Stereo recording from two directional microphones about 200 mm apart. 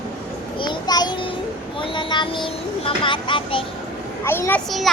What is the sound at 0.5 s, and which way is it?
Speech, 20° left (ahead or behind).